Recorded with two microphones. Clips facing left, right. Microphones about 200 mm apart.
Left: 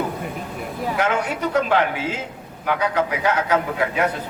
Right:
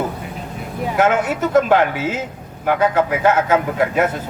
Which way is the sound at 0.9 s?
45° right (ahead or behind).